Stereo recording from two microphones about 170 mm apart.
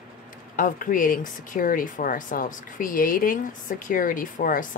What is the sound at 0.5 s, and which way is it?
Speech, 50° left (ahead or behind).